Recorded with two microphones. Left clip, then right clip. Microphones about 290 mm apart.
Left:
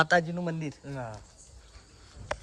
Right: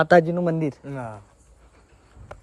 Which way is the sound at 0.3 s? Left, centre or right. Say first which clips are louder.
Right 11 dB; centre.